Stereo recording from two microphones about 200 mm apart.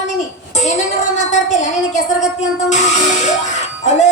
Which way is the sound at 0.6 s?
35° left (ahead or behind).